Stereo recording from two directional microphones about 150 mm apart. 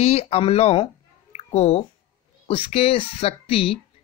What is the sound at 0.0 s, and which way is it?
Speech, 45° left (ahead or behind).